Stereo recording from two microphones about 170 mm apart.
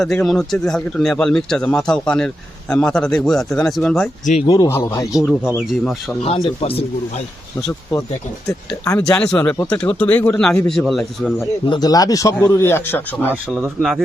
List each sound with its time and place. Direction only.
0.0 s speech: centre (ahead or behind)
4.5 s speech: 20° left (ahead or behind)
5.1 s speech: centre (ahead or behind)
6.2 s speech: 35° left (ahead or behind)
8.4 s speech: 15° left (ahead or behind)
9.0 s speech: 5° left (ahead or behind)
11.6 s speech: 25° left (ahead or behind)